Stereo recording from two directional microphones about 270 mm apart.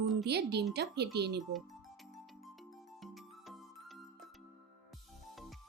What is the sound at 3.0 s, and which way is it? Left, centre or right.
Music, centre.